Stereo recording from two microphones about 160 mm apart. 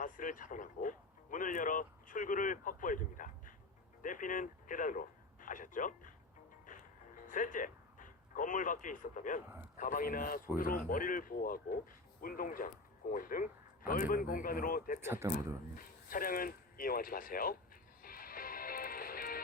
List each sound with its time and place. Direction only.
0.0 s speech: 55° left (ahead or behind)
6.7 s music: 55° left (ahead or behind)
7.3 s speech: 55° left (ahead or behind)
15.0 s a man's voice: 15° right (ahead or behind)
15.7 s speech: 60° left (ahead or behind)
18.0 s music: 65° left (ahead or behind)